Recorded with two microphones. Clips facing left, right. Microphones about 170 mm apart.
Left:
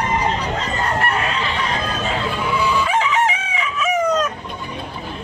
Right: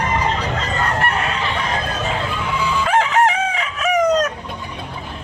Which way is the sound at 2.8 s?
55° right (ahead or behind).